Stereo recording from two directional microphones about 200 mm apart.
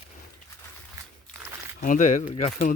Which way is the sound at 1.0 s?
15° right (ahead or behind).